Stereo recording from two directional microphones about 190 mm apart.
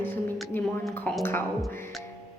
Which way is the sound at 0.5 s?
10° left (ahead or behind).